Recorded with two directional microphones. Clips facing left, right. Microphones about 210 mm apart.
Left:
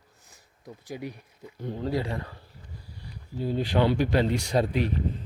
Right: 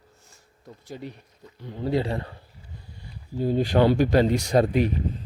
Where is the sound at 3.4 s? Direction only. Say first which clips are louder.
Right 4 dB; 45° right (ahead or behind).